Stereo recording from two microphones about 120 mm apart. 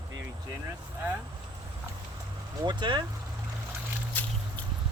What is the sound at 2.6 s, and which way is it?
Speech, 40° right (ahead or behind).